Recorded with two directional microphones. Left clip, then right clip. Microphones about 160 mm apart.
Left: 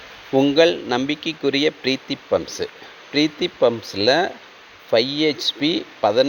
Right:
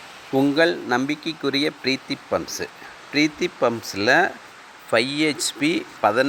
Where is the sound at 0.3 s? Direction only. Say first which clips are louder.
Left 3 dB; 20° left (ahead or behind).